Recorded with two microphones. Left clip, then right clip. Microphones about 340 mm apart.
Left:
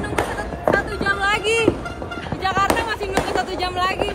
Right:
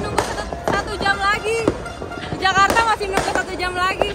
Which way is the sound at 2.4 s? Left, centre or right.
Centre.